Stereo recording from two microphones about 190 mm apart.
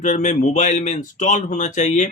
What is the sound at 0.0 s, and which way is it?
Speech, 40° left (ahead or behind).